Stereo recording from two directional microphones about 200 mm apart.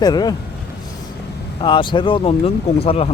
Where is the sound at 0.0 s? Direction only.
20° left (ahead or behind).